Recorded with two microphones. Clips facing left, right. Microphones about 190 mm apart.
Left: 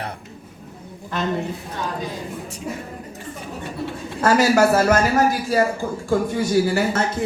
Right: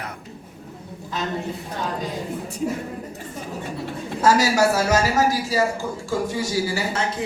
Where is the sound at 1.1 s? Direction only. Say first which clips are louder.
Left 3 dB; 60° left (ahead or behind).